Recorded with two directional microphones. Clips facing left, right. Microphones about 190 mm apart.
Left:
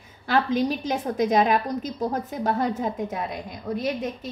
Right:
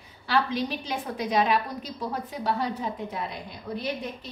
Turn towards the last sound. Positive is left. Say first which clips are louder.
# left 5 dB
turn(degrees=45)  # may be behind; listen again after turning